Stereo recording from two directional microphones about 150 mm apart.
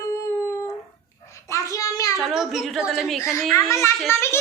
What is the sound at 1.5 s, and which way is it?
Child singing, 20° left (ahead or behind).